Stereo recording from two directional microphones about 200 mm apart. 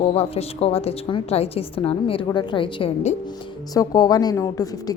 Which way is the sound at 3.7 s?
20° left (ahead or behind).